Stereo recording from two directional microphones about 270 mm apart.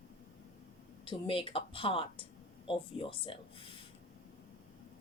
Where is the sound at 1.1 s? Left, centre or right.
Centre.